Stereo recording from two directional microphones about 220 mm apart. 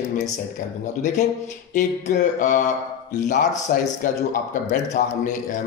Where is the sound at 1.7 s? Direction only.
35° left (ahead or behind).